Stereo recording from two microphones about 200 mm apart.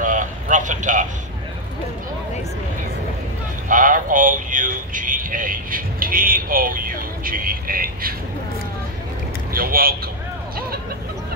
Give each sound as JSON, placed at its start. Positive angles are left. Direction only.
{"t": 0.0, "sound": "a sound", "side_deg": -40}
{"t": 3.6, "sound": "speech", "side_deg": -40}
{"t": 9.5, "sound": "a man's voice", "side_deg": -45}